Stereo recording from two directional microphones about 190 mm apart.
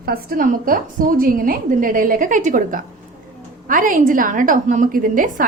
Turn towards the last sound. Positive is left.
turn(degrees=-45)  # may be behind; listen again after turning